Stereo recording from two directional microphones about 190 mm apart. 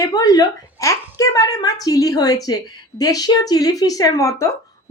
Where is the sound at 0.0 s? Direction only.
20° left (ahead or behind).